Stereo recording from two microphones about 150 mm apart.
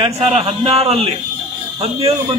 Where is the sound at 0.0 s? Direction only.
40° right (ahead or behind).